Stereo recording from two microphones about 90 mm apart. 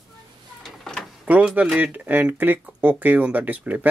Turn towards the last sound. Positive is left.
turn(degrees=-20)  # may be behind; listen again after turning